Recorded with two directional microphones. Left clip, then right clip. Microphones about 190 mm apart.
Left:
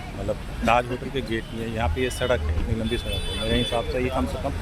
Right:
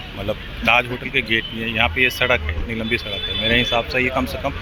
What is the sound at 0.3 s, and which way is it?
Speech, centre (ahead or behind).